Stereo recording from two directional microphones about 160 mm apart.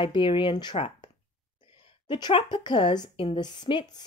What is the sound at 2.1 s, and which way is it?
Speech, 30° left (ahead or behind).